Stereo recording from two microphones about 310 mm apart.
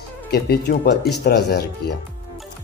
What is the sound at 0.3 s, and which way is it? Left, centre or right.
Speech, left.